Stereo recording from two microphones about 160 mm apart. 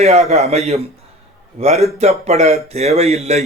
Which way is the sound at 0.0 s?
45° right (ahead or behind).